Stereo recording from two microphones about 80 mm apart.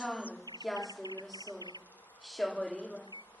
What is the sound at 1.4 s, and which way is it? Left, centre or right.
Speech, left.